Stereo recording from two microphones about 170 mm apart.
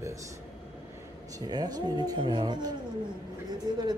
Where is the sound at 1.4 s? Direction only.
25° right (ahead or behind).